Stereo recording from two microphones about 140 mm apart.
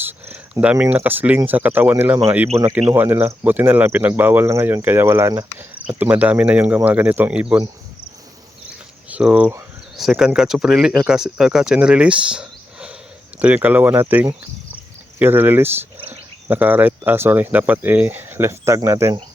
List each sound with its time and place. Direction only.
0.0 s a sound: 15° right (ahead or behind)
1.4 s cricket: 10° right (ahead or behind)
9.0 s speech: 10° right (ahead or behind)
13.4 s cricket: 10° right (ahead or behind)